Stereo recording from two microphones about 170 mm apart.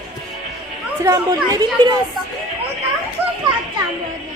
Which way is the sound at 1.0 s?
20° right (ahead or behind).